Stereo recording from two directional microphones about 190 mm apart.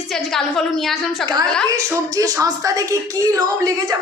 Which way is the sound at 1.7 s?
15° right (ahead or behind).